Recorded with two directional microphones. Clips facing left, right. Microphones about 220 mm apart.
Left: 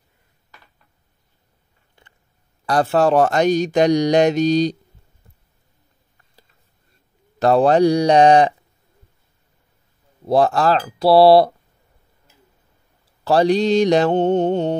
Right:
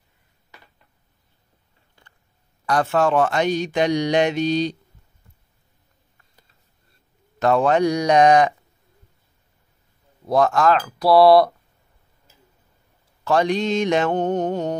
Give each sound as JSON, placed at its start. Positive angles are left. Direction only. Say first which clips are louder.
{"t": 2.6, "sound": "speech", "louder": "left 3 dB", "side_deg": 35}
{"t": 7.3, "sound": "speech", "louder": "left 4 dB", "side_deg": 35}
{"t": 10.2, "sound": "speech", "louder": "left 2 dB", "side_deg": 30}
{"t": 13.2, "sound": "speech", "louder": "left 4 dB", "side_deg": 35}